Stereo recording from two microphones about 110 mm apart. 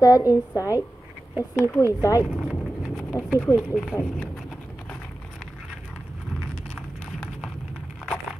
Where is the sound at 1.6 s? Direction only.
20° left (ahead or behind).